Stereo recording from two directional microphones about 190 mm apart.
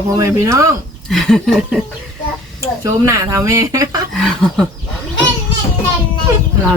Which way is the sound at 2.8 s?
15° right (ahead or behind).